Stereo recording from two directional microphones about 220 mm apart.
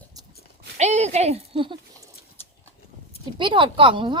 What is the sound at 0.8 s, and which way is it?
Speech, 30° right (ahead or behind).